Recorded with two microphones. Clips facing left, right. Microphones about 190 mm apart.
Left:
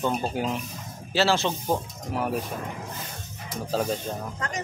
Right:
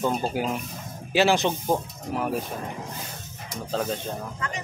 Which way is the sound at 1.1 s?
15° right (ahead or behind).